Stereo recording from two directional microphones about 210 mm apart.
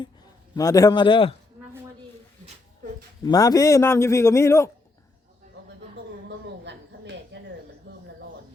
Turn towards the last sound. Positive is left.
turn(degrees=-55)  # may be behind; listen again after turning